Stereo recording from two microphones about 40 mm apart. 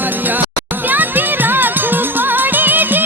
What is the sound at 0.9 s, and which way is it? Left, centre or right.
Music, right.